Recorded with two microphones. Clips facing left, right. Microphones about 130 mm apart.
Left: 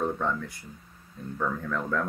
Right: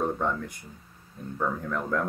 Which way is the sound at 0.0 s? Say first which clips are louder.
Right 1 dB; 15° right (ahead or behind).